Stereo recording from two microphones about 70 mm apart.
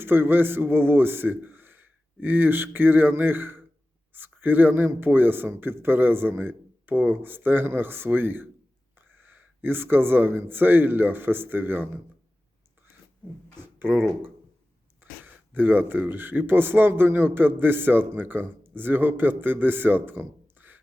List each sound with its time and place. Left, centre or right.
0.0 s a man's voice: right
13.6 s speech: right